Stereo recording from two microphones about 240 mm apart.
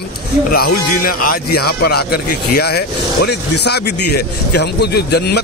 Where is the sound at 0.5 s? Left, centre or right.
Left.